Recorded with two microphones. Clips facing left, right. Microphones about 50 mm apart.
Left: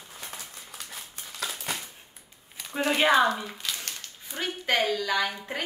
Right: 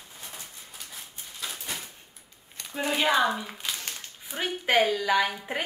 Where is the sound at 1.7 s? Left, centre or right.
Left.